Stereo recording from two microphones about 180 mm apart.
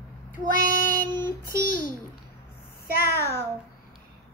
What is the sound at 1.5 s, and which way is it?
Babbling, 50° left (ahead or behind).